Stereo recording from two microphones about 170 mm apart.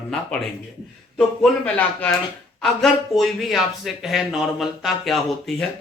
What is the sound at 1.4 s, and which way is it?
A man's voice, 5° left (ahead or behind).